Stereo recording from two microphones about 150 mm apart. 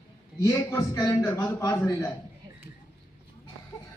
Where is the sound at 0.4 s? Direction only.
25° left (ahead or behind).